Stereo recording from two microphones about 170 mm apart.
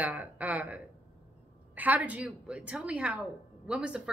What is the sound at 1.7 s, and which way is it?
A woman's voice, 10° right (ahead or behind).